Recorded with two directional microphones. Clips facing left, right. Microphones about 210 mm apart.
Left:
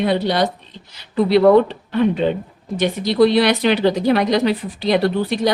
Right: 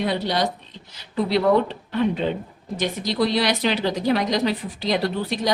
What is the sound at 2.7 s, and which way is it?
Speech, 60° left (ahead or behind).